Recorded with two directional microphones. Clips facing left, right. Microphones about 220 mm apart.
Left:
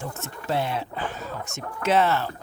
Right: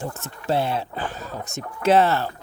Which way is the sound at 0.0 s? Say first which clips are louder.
Right 3 dB; 30° right (ahead or behind).